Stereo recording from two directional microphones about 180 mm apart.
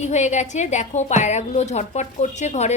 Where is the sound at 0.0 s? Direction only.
40° left (ahead or behind).